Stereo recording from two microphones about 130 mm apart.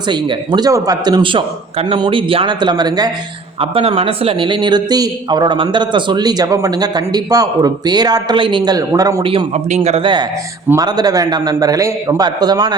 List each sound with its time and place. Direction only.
0.1 s a man's voice: 35° right (ahead or behind)
3.6 s a man's voice: 45° right (ahead or behind); by 9.2 s 25° right (ahead or behind)
9.2 s a man's voice: 40° right (ahead or behind)
9.6 s speech: 60° right (ahead or behind)
10.0 s a man's voice: 35° right (ahead or behind)